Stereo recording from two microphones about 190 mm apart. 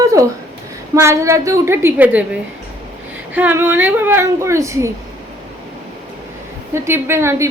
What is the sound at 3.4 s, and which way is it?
A woman's voice, 10° right (ahead or behind).